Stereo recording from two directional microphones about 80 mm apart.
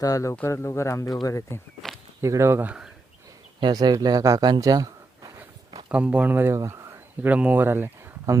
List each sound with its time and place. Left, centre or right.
0.0 s speech: left
0.4 s speech: left
2.2 s speech: right
3.6 s speech: right
4.4 s speech: right
4.6 s a sound: right
5.9 s speech: centre
6.7 s a sound: right
7.3 s speech: centre